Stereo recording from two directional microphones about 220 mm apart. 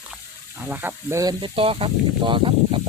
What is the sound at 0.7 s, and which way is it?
Speech, 10° right (ahead or behind).